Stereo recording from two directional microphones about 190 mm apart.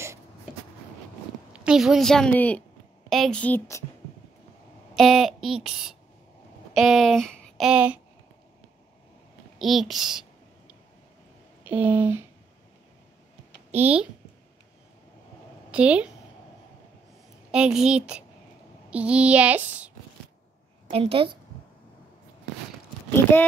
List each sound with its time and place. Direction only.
1.5 s a woman's voice: 5° right (ahead or behind); by 3.8 s 15° left (ahead or behind)
4.9 s a woman's voice: centre (ahead or behind)
9.6 s a woman's voice: centre (ahead or behind)
11.6 s speech: 10° right (ahead or behind)
13.7 s speech: 10° right (ahead or behind)
15.7 s a woman's voice: 5° right (ahead or behind)
17.5 s a woman's voice: 5° right (ahead or behind)
20.9 s a woman's voice: 30° right (ahead or behind)